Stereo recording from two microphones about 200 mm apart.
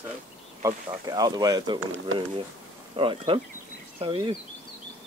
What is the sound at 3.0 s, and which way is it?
Speech, 25° right (ahead or behind).